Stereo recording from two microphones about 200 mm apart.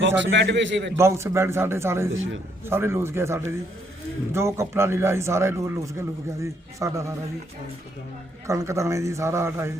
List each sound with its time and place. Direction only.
0.2 s a man's voice: 60° right (ahead or behind)
0.9 s a man's voice: 15° right (ahead or behind)
2.1 s a man's voice: 75° right (ahead or behind)
2.6 s a man's voice: 10° right (ahead or behind)
8.4 s a man's voice: 15° right (ahead or behind)